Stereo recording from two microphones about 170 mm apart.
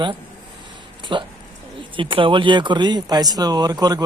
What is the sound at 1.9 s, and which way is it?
Speech, 30° right (ahead or behind).